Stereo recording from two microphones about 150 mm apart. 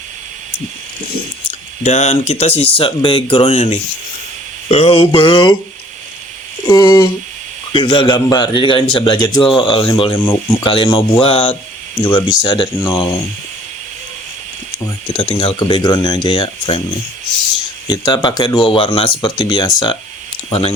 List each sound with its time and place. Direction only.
1.8 s a man's voice: 50° left (ahead or behind)
4.7 s a man's voice: 40° left (ahead or behind)
6.7 s a man's voice: 25° left (ahead or behind)
14.8 s a man's voice: 35° left (ahead or behind)
17.8 s a man's voice: 30° left (ahead or behind)
20.5 s a man's voice: 40° left (ahead or behind)